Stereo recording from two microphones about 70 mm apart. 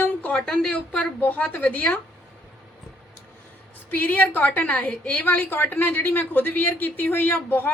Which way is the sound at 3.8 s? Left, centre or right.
Left.